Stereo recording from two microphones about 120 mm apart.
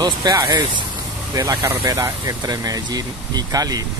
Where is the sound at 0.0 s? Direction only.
35° right (ahead or behind).